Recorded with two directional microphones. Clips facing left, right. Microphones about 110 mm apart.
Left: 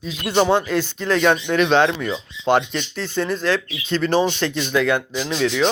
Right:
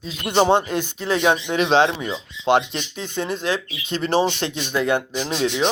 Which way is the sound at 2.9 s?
20° right (ahead or behind).